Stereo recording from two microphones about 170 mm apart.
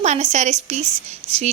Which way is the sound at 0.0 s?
40° right (ahead or behind).